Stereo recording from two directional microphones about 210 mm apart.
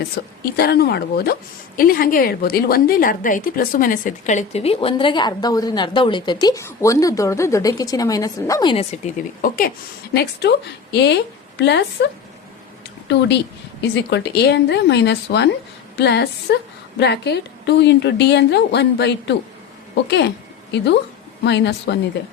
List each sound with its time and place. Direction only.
0.4 s a woman's voice: 50° left (ahead or behind); by 8.7 s 15° left (ahead or behind)
8.7 s a woman's voice: 30° left (ahead or behind)
9.4 s a woman's voice: 45° left (ahead or behind)
10.4 s a woman's voice: 55° left (ahead or behind)
13.1 s a woman's voice: 55° left (ahead or behind)